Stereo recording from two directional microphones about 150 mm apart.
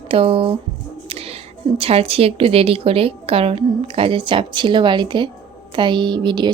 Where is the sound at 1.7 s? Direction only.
40° right (ahead or behind).